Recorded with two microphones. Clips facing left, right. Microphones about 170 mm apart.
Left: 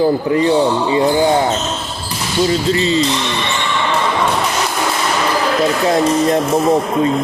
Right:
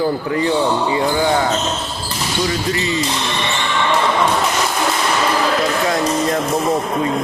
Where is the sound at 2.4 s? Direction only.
25° left (ahead or behind).